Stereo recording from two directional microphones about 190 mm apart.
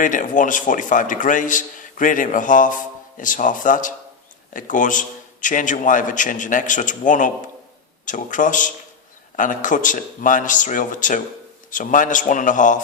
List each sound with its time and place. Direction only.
0.0 s a man's voice: 45° left (ahead or behind)